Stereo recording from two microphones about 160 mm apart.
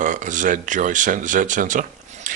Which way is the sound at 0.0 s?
55° right (ahead or behind).